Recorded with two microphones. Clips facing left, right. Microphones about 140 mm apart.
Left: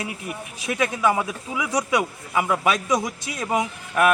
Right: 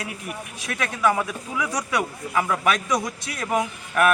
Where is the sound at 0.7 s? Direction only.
15° left (ahead or behind).